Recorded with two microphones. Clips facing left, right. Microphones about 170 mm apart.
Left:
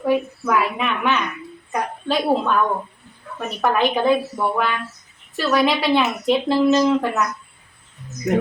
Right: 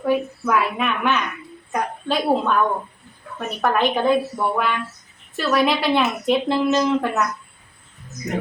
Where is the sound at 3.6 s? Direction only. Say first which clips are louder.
Left 1 dB; centre (ahead or behind).